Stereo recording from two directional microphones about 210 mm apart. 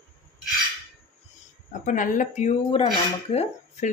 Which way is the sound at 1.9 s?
40° left (ahead or behind).